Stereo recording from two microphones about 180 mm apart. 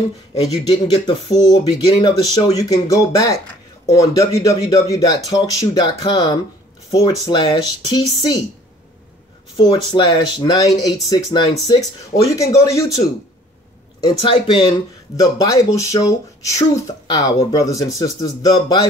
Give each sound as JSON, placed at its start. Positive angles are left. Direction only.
{"t": 0.7, "sound": "speech", "side_deg": 20}
{"t": 9.6, "sound": "speech", "side_deg": 25}